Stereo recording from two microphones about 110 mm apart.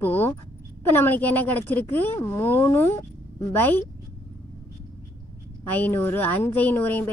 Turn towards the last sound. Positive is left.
turn(degrees=20)  # may be behind; listen again after turning